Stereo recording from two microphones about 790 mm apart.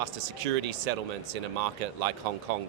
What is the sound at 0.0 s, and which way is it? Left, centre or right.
A man's voice, right.